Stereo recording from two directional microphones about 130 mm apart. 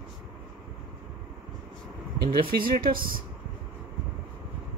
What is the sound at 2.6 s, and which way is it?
Speech, 90° right.